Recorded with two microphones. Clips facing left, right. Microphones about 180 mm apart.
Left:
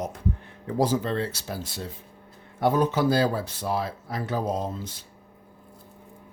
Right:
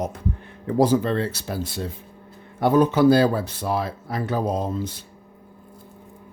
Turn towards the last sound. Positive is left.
turn(degrees=-60)  # may be behind; listen again after turning